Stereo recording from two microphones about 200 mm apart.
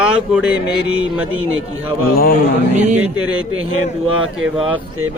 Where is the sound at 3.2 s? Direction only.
90° right.